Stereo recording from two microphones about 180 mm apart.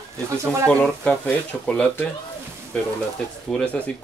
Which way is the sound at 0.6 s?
5° left (ahead or behind).